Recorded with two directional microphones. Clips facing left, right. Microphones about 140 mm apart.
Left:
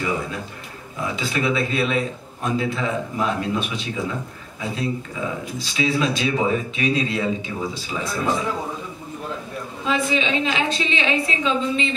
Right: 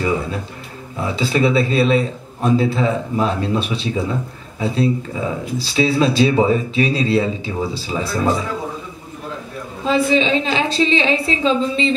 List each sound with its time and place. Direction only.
1.0 s a man's voice: 30° right (ahead or behind)
9.8 s a man's voice: 30° right (ahead or behind)